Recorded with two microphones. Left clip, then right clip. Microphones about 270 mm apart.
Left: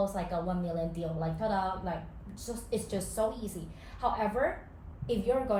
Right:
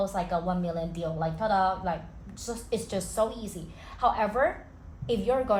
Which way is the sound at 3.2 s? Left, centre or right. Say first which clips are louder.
Right 4 dB; centre.